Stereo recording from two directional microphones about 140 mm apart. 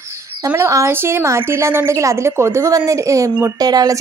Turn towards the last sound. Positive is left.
turn(degrees=-30)  # may be behind; listen again after turning